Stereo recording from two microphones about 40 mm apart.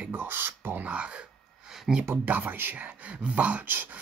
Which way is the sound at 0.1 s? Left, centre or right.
Right.